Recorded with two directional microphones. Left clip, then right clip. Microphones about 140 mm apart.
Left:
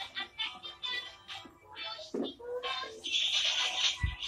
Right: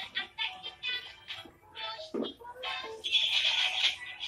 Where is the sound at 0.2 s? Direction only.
15° right (ahead or behind).